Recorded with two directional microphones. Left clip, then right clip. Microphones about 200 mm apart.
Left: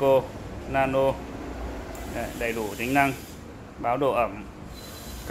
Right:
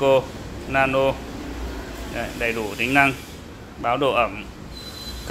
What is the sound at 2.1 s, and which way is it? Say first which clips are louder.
Speech: right 4 dB; centre (ahead or behind).